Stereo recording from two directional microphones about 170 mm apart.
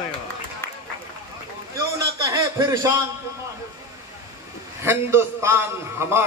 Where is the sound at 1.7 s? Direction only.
20° right (ahead or behind).